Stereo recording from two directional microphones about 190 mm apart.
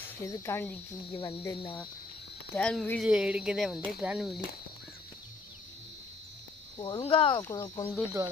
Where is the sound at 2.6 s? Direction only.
5° left (ahead or behind).